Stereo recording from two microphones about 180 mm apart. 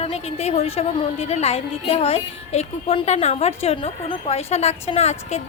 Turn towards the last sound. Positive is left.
turn(degrees=35)  # may be behind; listen again after turning